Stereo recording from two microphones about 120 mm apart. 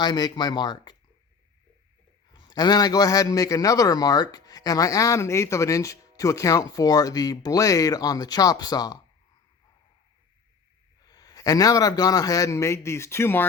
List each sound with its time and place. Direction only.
0.0 s a man's voice: 35° left (ahead or behind)
2.3 s a man's voice: 35° left (ahead or behind)
11.0 s a man's voice: 35° left (ahead or behind)